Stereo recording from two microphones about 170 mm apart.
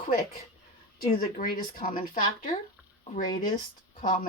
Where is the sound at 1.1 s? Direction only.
55° left (ahead or behind).